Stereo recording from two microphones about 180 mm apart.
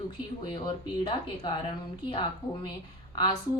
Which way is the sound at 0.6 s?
25° left (ahead or behind).